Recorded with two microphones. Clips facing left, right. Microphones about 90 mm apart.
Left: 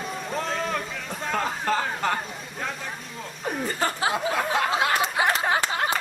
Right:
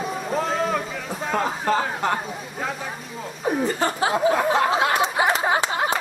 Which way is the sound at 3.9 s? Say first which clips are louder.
Right 5 dB; 30° right (ahead or behind).